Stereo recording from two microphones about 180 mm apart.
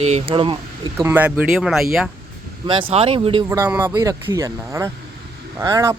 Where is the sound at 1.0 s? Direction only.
10° right (ahead or behind).